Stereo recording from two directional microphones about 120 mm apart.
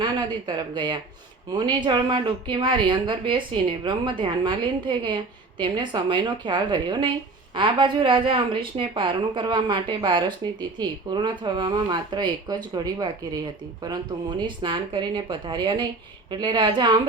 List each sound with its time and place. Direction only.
0.0 s a woman's voice: 35° right (ahead or behind)